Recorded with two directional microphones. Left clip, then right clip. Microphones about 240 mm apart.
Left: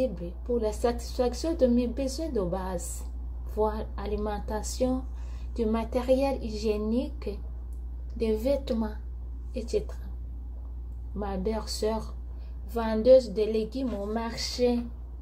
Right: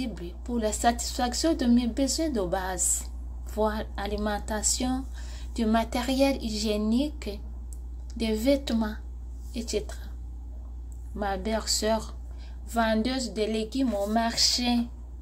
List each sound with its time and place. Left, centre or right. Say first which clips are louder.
0.0 s a woman's voice: left 6 dB; centre
11.1 s a woman's voice: right 3 dB; centre